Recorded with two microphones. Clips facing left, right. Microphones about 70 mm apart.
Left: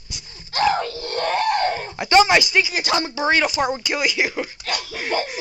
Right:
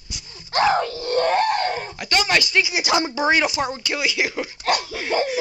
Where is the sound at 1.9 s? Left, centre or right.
Left.